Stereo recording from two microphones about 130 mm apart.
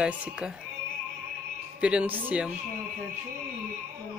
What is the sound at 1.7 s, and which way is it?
Speech, 10° right (ahead or behind).